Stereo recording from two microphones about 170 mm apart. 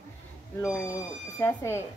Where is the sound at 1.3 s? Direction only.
15° left (ahead or behind).